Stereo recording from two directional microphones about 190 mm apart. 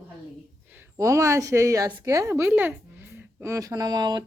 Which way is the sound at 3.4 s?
15° right (ahead or behind).